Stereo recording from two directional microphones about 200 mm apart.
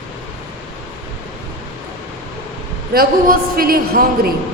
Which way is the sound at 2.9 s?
45° right (ahead or behind).